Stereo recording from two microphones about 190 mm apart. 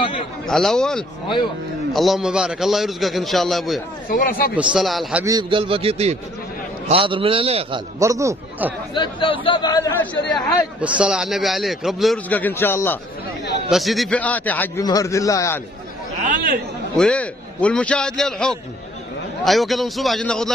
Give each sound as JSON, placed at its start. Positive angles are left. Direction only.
{"t": 0.0, "sound": "a sound", "side_deg": 30}
{"t": 0.5, "sound": "a man's voice", "side_deg": 0}
{"t": 4.1, "sound": "speech", "side_deg": 50}
{"t": 4.6, "sound": "a man's voice", "side_deg": 0}
{"t": 5.2, "sound": "a man's voice", "side_deg": -20}
{"t": 8.0, "sound": "a man's voice", "side_deg": -15}
{"t": 8.9, "sound": "speech", "side_deg": 25}
{"t": 10.3, "sound": "a man's voice", "side_deg": -5}
{"t": 13.7, "sound": "a man's voice", "side_deg": 0}
{"t": 16.9, "sound": "a man's voice", "side_deg": 5}